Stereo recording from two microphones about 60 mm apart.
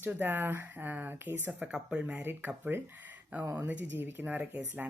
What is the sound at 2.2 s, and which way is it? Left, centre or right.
Speech, right.